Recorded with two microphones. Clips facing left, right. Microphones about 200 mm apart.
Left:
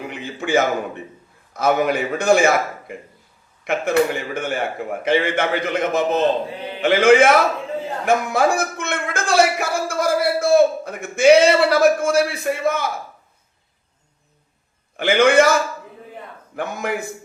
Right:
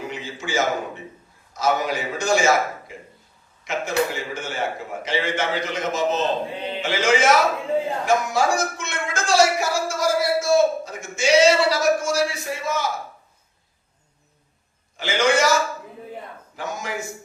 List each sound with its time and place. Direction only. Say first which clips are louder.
0.1 s a man's voice: left 7 dB; 55° left (ahead or behind)
14.9 s a man's voice: left 6 dB; 60° left (ahead or behind)
16.6 s a man's voice: left 5 dB; 60° left (ahead or behind)